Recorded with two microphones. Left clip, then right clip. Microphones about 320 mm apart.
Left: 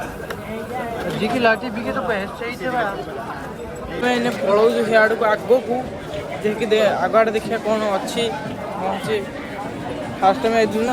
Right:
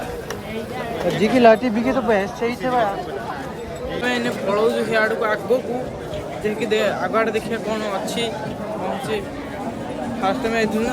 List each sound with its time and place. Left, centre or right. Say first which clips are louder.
1.2 s speech: right 4 dB; right
4.0 s speech: left 3 dB; centre
10.2 s speech: left 5 dB; centre